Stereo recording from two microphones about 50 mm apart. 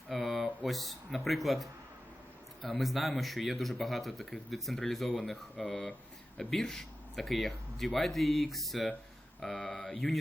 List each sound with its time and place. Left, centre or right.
0.1 s a sound: centre
0.6 s speech: centre
5.6 s speech: centre
9.4 s speech: left
9.9 s speech: centre